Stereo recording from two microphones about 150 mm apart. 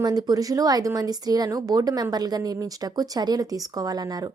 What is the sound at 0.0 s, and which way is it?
A woman's voice, 25° right (ahead or behind).